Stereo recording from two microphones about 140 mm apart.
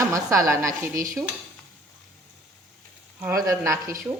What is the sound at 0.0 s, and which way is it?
Speech, 25° right (ahead or behind).